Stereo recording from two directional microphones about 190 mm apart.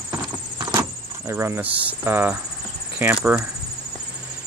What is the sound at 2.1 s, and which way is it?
Speech, 10° right (ahead or behind).